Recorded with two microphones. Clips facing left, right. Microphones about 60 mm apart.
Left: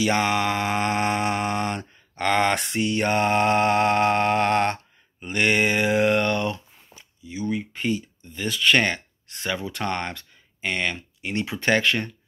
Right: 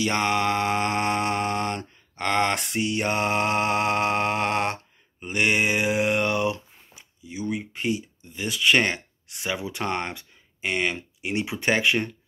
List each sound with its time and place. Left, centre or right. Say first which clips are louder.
0.0 s mantra: left 1 dB; centre
5.2 s a sound: left 1 dB; centre
11.1 s speech: even; centre